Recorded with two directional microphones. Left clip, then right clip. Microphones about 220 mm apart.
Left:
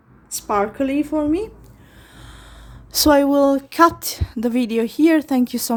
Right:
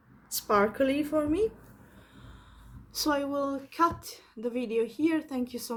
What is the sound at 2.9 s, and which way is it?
Speech, 50° left (ahead or behind).